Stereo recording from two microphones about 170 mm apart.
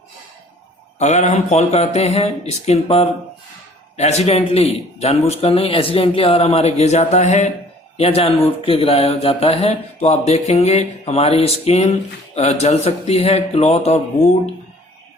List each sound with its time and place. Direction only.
0.9 s a man's voice: 40° left (ahead or behind)